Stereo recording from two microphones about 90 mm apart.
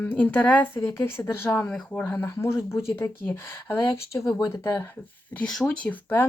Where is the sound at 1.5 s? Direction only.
15° left (ahead or behind).